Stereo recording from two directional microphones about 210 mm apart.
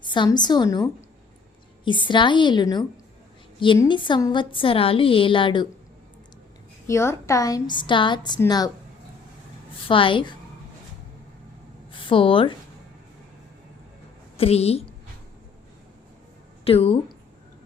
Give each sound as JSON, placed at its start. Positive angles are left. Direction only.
{"t": 0.0, "sound": "a woman's voice", "side_deg": 20}
{"t": 6.8, "sound": "a woman's voice", "side_deg": 15}
{"t": 9.9, "sound": "a woman's voice", "side_deg": 25}
{"t": 11.9, "sound": "speech", "side_deg": 25}
{"t": 14.3, "sound": "a woman's voice", "side_deg": 30}
{"t": 16.6, "sound": "a woman's voice", "side_deg": 25}